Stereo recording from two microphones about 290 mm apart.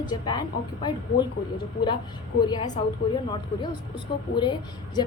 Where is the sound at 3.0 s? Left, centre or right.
Centre.